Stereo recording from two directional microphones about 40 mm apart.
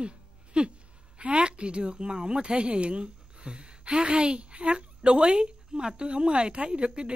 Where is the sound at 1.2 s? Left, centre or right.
Right.